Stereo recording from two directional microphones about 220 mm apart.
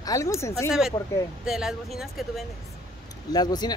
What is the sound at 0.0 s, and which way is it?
Speech, 15° left (ahead or behind).